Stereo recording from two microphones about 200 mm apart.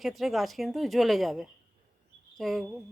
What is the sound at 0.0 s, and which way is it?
A woman's voice, centre (ahead or behind).